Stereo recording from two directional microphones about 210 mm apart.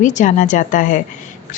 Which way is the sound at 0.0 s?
35° left (ahead or behind).